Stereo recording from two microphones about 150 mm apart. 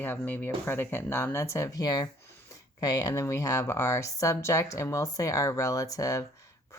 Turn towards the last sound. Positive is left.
turn(degrees=20)  # may be behind; listen again after turning